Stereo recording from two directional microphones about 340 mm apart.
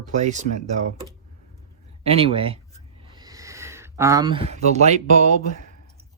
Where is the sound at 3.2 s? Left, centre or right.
Centre.